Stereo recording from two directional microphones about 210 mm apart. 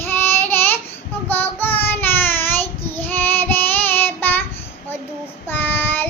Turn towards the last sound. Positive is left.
turn(degrees=10)  # may be behind; listen again after turning